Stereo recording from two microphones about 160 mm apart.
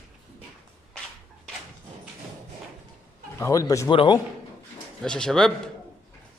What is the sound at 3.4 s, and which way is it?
Speech, 20° left (ahead or behind).